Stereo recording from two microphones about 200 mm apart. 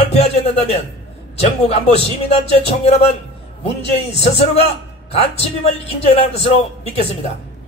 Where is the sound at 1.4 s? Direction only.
30° left (ahead or behind).